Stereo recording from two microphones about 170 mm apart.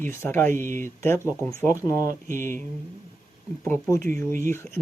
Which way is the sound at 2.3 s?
50° right (ahead or behind).